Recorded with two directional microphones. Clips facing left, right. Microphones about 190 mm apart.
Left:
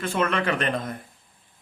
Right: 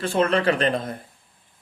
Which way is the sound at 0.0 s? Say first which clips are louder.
Right 4 dB; 30° right (ahead or behind).